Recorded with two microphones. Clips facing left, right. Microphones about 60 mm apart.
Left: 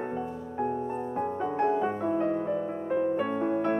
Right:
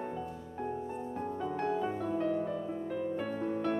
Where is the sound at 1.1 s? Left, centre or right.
Left.